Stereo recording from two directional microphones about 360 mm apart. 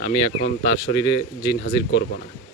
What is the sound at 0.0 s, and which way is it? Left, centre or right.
Speech, left.